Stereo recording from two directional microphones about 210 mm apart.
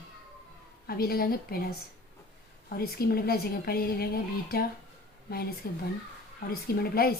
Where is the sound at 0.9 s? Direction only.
45° left (ahead or behind).